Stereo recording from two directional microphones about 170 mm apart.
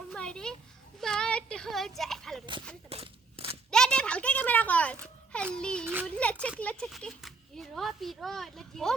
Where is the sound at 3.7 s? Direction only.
5° left (ahead or behind).